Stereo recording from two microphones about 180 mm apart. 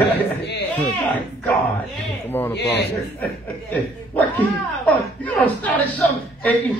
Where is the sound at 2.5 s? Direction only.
70° left (ahead or behind).